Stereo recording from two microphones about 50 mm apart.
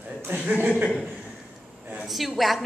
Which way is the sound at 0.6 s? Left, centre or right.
Right.